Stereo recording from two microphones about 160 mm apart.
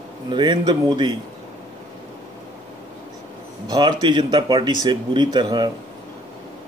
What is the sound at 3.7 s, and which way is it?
Speech, 25° right (ahead or behind).